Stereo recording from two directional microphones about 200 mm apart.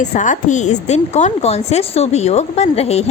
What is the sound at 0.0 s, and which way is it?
Speech, 40° left (ahead or behind).